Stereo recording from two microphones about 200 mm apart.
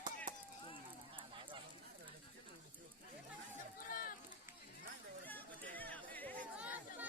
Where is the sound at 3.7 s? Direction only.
45° left (ahead or behind).